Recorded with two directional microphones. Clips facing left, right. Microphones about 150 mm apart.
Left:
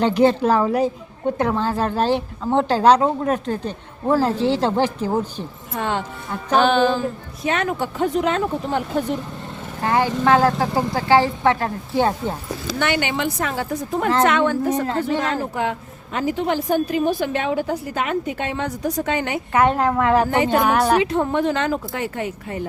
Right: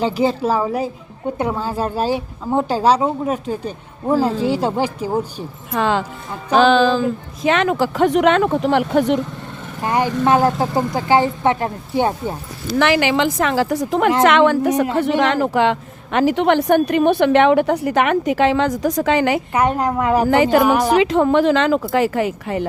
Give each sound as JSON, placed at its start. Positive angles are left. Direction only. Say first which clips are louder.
{"t": 0.0, "sound": "a woman's voice", "louder": "left 2 dB", "side_deg": -5}
{"t": 5.7, "sound": "speech", "louder": "right 5 dB", "side_deg": -90}
{"t": 9.8, "sound": "a woman's voice", "louder": "right 1 dB", "side_deg": -15}
{"t": 12.8, "sound": "speech", "louder": "right 6 dB", "side_deg": -90}
{"t": 14.9, "sound": "a woman's voice", "louder": "right 5 dB", "side_deg": -75}
{"t": 19.5, "sound": "a woman's voice", "louder": "left 4 dB", "side_deg": -10}
{"t": 20.3, "sound": "speech", "louder": "right 4 dB", "side_deg": -90}